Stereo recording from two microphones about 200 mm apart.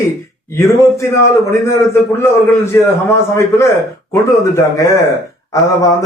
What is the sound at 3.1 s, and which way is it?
A man's voice, 15° left (ahead or behind).